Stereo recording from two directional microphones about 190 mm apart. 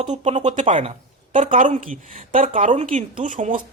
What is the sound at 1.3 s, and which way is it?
Speech, 30° right (ahead or behind).